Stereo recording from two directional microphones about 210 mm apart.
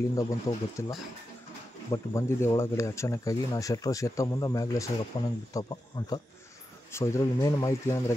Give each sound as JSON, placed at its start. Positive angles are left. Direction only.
{"t": 0.1, "sound": "speech", "side_deg": 15}